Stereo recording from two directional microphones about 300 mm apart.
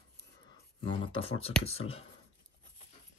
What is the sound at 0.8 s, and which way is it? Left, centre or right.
Speech, centre.